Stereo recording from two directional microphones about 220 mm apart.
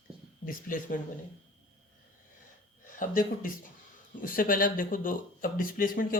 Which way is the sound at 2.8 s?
35° left (ahead or behind).